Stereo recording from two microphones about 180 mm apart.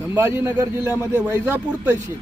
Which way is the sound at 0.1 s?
10° right (ahead or behind).